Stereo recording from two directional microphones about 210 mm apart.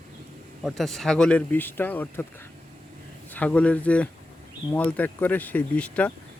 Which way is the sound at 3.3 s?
5° left (ahead or behind).